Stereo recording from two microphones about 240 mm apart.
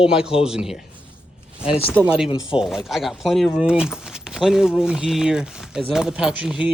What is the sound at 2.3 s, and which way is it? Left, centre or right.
Speech, left.